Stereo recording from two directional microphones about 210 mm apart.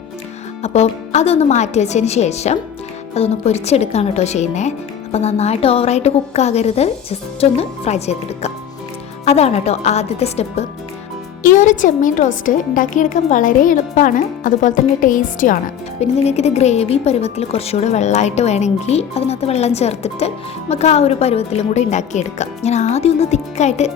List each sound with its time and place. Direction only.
0.6 s a woman's voice: 30° left (ahead or behind)